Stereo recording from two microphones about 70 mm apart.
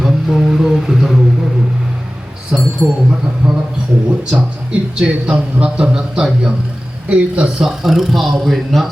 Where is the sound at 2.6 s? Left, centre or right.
Centre.